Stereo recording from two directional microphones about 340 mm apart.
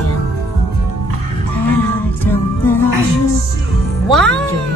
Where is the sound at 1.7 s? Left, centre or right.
Centre.